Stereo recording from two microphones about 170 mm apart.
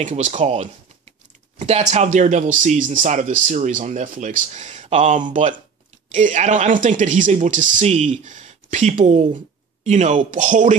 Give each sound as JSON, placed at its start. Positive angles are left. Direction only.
{"t": 0.0, "sound": "speech", "side_deg": -45}